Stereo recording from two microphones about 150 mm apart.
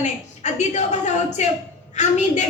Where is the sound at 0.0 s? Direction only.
50° left (ahead or behind).